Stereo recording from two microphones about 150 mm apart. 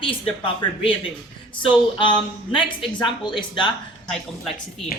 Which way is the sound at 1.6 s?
30° left (ahead or behind).